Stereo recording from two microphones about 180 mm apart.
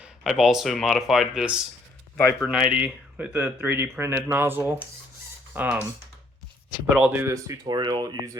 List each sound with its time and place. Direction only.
0.0 s speech: centre (ahead or behind)
6.9 s speech: 10° right (ahead or behind)